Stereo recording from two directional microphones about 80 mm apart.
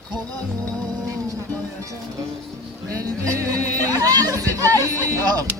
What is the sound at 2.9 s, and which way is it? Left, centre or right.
Speech, right.